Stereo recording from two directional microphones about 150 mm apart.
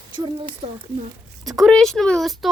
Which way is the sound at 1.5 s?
Centre (ahead or behind).